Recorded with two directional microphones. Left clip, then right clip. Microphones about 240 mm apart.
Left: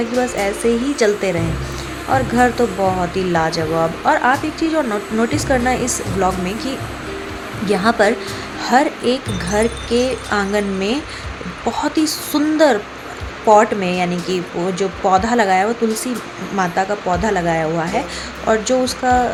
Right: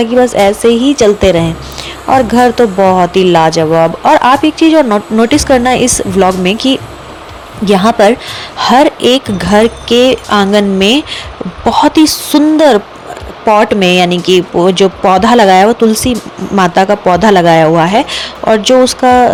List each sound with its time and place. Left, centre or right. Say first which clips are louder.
0.3 s speech: right 10 dB; right